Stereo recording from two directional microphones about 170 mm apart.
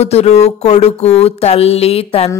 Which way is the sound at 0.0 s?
40° left (ahead or behind).